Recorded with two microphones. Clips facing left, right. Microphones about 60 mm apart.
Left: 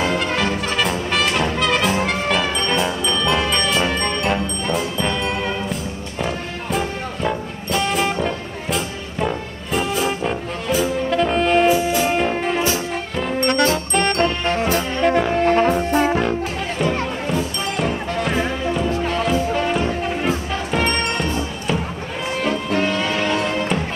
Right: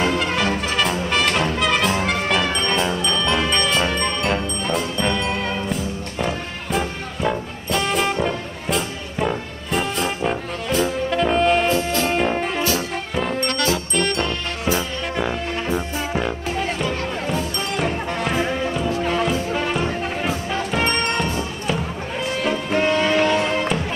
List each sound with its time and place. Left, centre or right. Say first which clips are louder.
0.2 s music: even; centre
1.6 s brass instrument: left 2 dB; centre
2.0 s music: even; centre
13.5 s music: left 4 dB; left
14.7 s music: left 3 dB; left
16.2 s music: left 2 dB; centre
22.5 s music: right 1 dB; centre